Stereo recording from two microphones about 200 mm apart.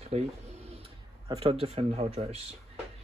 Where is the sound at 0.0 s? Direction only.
30° right (ahead or behind).